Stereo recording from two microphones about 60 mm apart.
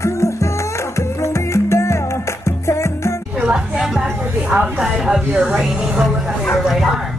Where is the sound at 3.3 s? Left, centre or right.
Centre.